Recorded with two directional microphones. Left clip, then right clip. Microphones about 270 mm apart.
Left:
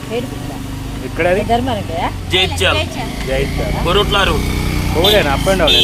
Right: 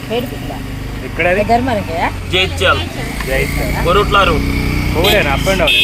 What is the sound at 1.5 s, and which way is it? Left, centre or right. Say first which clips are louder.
Speech: right 3 dB; right.